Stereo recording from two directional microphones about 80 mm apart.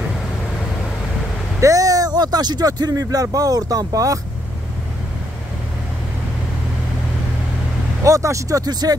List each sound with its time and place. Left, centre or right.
1.6 s speech: right
8.0 s speech: right